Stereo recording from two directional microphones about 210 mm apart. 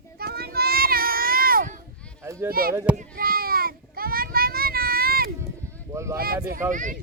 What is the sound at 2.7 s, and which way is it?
Speech, 15° right (ahead or behind).